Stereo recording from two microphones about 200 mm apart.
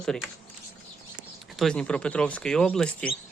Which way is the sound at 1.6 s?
5° left (ahead or behind).